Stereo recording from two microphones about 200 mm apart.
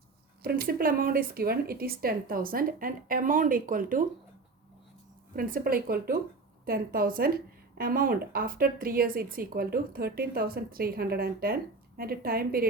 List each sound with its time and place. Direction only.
0.4 s speech: 50° right (ahead or behind)
5.3 s speech: 45° right (ahead or behind)